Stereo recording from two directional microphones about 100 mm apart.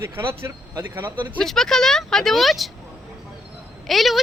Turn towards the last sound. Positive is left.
turn(degrees=0)  # may be behind; listen again after turning